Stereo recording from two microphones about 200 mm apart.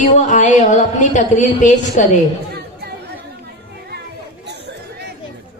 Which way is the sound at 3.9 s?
55° right (ahead or behind).